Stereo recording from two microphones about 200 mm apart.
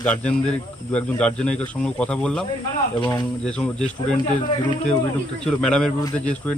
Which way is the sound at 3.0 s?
20° left (ahead or behind).